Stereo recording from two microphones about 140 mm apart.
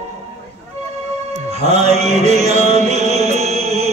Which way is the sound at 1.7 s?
50° right (ahead or behind).